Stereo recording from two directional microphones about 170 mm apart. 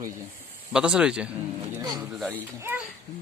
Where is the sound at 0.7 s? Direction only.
5° right (ahead or behind).